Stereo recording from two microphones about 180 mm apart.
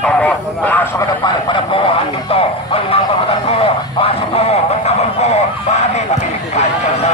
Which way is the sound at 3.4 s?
35° left (ahead or behind).